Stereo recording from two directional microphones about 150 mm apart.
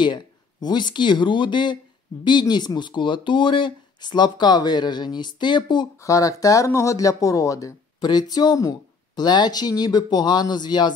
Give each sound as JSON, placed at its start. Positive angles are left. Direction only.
{"t": 0.0, "sound": "speech", "side_deg": 30}